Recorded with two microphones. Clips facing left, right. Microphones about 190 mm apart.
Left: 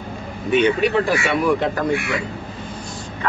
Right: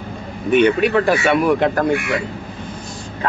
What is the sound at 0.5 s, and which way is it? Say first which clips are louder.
A man's voice: right 3 dB; 55° right (ahead or behind).